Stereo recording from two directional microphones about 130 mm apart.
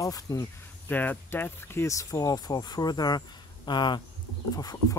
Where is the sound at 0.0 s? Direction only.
25° left (ahead or behind).